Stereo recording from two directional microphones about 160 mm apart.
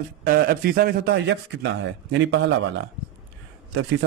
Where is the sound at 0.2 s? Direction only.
70° right (ahead or behind); by 2.0 s 90° right.